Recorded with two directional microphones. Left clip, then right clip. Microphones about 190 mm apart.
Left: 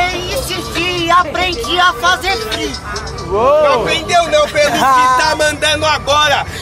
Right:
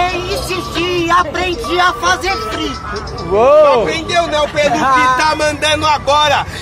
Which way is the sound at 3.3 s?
55° right (ahead or behind).